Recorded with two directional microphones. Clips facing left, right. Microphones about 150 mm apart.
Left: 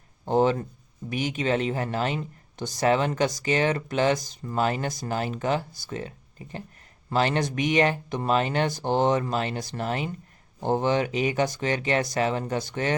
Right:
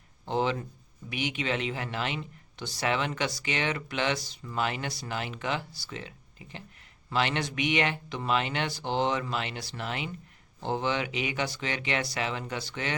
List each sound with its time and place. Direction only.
0.3 s speech: 45° left (ahead or behind)